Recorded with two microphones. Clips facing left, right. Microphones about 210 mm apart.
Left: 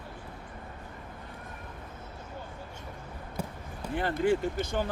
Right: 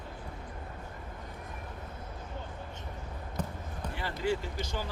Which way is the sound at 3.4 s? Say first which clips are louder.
Even; 10° left (ahead or behind).